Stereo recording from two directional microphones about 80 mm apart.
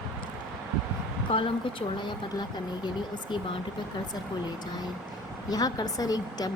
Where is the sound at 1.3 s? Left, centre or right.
Left.